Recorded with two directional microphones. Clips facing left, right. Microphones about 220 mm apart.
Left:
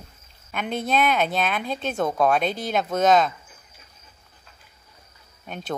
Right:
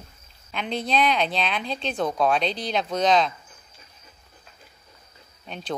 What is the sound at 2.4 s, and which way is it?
Speech, 50° left (ahead or behind).